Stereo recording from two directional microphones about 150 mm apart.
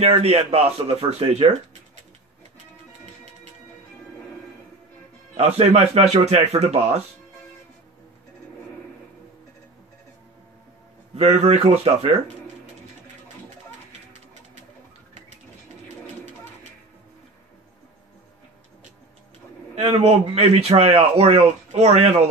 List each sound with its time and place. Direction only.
0.0 s a man's voice: 45° right (ahead or behind)
5.6 s a man's voice: 45° right (ahead or behind)
11.1 s a man's voice: 45° right (ahead or behind)
19.7 s a man's voice: 45° right (ahead or behind)